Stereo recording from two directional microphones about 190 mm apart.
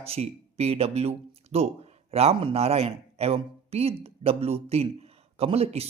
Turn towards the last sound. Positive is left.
turn(degrees=-30)  # may be behind; listen again after turning